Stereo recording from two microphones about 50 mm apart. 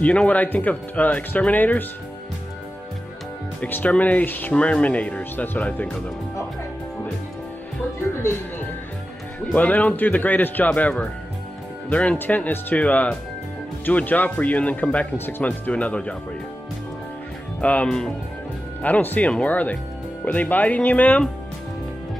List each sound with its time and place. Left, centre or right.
0.0 s speech: left
3.6 s speech: left
4.6 s speech: left
5.3 s speech: left
9.6 s speech: left
10.7 s speech: left
15.1 s speech: left
17.6 s speech: left
17.8 s speech: centre
18.8 s speech: left